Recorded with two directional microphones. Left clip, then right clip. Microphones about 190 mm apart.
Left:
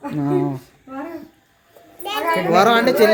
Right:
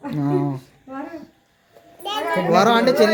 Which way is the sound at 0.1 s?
10° left (ahead or behind).